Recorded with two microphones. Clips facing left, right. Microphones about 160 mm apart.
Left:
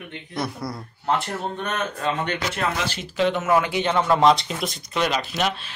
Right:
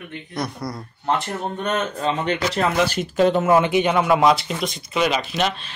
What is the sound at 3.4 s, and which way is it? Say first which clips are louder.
Speech: right 4 dB; 25° right (ahead or behind).